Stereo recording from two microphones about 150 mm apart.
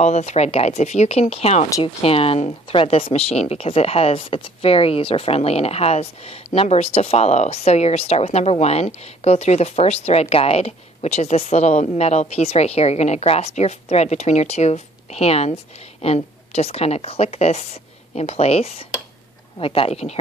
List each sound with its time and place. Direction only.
0.0 s a woman's voice: 45° left (ahead or behind)